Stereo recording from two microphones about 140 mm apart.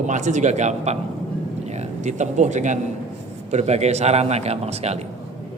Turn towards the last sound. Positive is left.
turn(degrees=-50)  # may be behind; listen again after turning